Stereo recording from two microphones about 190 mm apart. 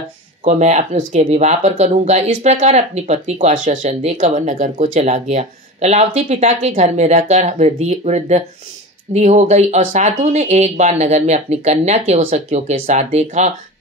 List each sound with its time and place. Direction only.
0.4 s speech: 35° right (ahead or behind)